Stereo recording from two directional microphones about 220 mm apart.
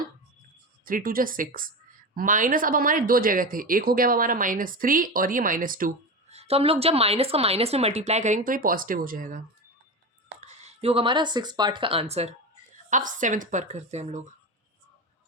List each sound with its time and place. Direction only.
0.9 s speech: 40° right (ahead or behind)
10.4 s speech: 30° right (ahead or behind)